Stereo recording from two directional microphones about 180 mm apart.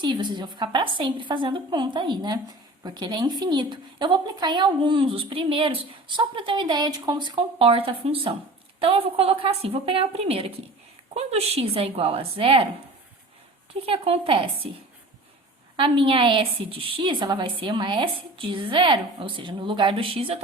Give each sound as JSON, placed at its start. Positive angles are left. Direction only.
{"t": 0.0, "sound": "a woman's voice", "side_deg": -25}
{"t": 13.8, "sound": "a woman's voice", "side_deg": -30}
{"t": 15.7, "sound": "a woman's voice", "side_deg": -30}